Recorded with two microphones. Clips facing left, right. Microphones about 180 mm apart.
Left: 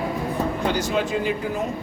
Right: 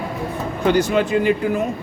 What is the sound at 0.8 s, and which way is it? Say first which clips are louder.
Speech: right 6 dB; 60° right (ahead or behind).